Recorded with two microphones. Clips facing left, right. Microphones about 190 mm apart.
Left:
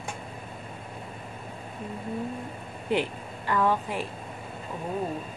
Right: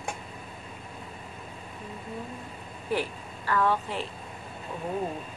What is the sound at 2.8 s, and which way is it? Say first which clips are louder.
A woman's voice: left 3 dB; 20° left (ahead or behind).